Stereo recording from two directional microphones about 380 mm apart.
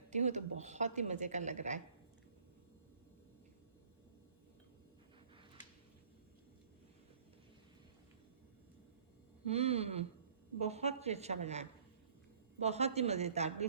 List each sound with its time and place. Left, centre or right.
0.1 s a woman's voice: centre
9.5 s a woman's voice: centre